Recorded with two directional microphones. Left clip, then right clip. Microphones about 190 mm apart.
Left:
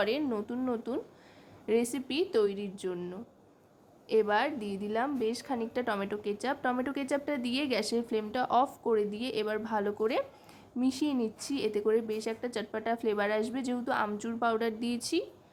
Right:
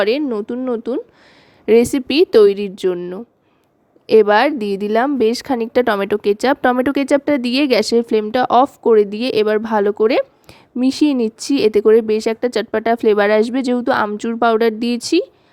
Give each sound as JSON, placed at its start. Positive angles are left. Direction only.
{"t": 0.0, "sound": "a woman's voice", "side_deg": -40}